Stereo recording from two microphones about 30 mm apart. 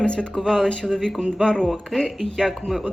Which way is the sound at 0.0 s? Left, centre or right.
Left.